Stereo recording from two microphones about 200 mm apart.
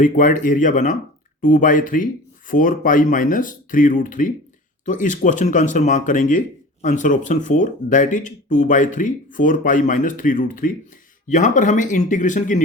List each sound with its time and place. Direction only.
0.0 s speech: 40° left (ahead or behind)